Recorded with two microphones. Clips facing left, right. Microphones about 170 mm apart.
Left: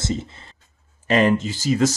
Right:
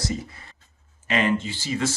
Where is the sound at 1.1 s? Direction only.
40° left (ahead or behind).